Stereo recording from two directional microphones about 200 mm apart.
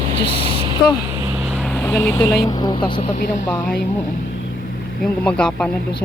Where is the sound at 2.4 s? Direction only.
20° left (ahead or behind).